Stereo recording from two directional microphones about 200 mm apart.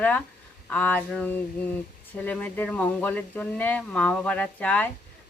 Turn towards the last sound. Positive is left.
turn(degrees=5)  # may be behind; listen again after turning